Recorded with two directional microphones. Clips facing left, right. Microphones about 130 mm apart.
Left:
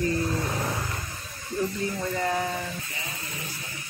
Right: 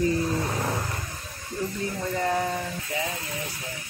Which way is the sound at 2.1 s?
5° right (ahead or behind).